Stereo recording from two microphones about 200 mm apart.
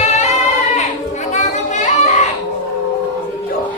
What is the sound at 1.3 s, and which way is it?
Children playing, 35° left (ahead or behind).